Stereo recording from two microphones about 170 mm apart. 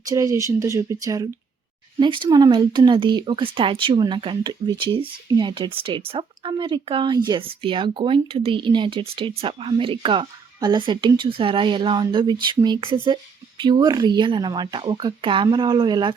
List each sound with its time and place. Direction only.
0.0 s speech: 20° right (ahead or behind)